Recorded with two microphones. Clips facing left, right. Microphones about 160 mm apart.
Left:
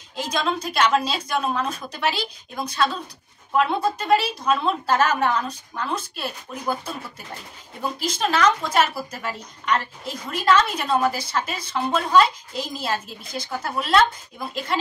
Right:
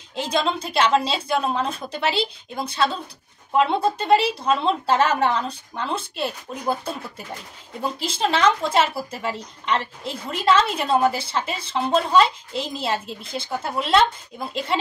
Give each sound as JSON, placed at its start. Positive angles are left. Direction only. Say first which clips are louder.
{"t": 0.1, "sound": "a woman's voice", "louder": "right 2 dB", "side_deg": -25}
{"t": 8.0, "sound": "a woman's voice", "louder": "even", "side_deg": -25}